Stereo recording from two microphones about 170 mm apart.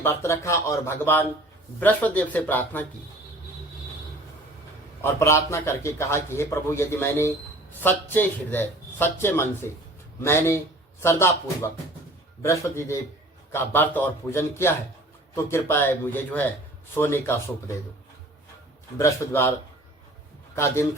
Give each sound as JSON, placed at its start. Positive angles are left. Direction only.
{"t": 0.0, "sound": "a man's voice", "side_deg": 15}
{"t": 5.0, "sound": "a man's voice", "side_deg": 15}
{"t": 18.9, "sound": "a man's voice", "side_deg": 15}